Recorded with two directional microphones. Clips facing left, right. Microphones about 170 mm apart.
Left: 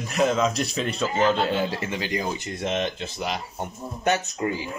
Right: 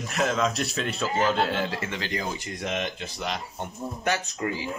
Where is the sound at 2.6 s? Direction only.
30° left (ahead or behind).